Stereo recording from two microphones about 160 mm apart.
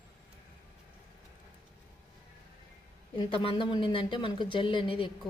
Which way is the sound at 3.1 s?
30° left (ahead or behind).